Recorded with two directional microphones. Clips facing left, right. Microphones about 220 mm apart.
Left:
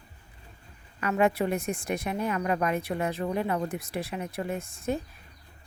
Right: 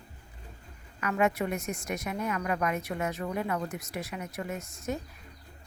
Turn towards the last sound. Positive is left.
turn(degrees=30)  # may be behind; listen again after turning